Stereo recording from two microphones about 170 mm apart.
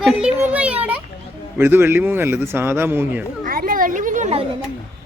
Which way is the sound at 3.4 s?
55° right (ahead or behind).